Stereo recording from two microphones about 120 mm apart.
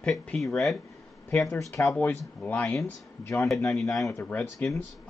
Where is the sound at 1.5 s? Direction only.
25° left (ahead or behind).